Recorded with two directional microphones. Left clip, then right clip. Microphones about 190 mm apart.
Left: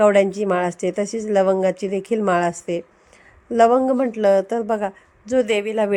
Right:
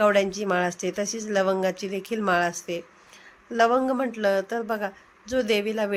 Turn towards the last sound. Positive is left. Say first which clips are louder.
# left 5 dB
turn(degrees=35)  # may be behind; listen again after turning